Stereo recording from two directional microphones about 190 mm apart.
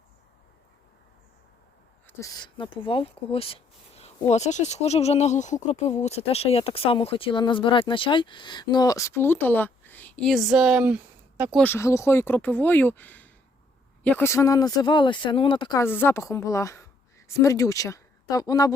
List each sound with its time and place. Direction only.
2.0 s speech: 20° left (ahead or behind); by 11.6 s 10° right (ahead or behind)
11.6 s speech: 15° left (ahead or behind)
15.8 s a woman's voice: 10° left (ahead or behind)